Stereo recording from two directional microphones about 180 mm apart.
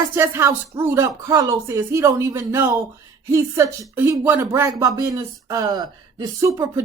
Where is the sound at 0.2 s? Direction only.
15° right (ahead or behind).